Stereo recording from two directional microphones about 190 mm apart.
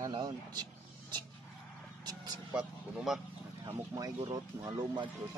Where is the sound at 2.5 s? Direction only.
5° right (ahead or behind).